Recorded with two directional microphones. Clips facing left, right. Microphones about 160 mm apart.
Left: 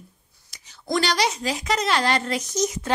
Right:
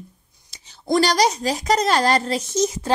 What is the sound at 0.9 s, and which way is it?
A woman's voice, 40° right (ahead or behind).